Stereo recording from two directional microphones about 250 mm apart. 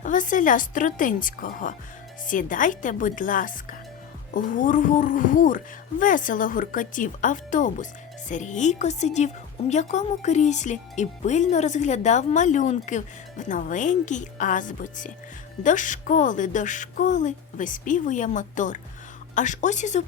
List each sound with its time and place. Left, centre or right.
0.0 s a woman's voice: left